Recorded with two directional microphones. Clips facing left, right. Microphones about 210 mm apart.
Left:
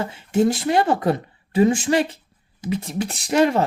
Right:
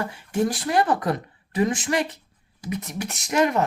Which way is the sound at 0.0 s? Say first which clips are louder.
Left 5 dB; 25° left (ahead or behind).